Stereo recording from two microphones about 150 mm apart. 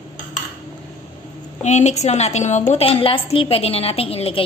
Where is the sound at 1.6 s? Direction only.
50° left (ahead or behind).